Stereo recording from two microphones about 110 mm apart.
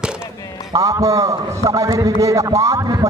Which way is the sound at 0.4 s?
35° left (ahead or behind).